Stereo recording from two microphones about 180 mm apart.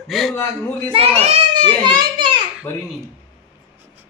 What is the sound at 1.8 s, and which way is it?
Children playing, 25° right (ahead or behind).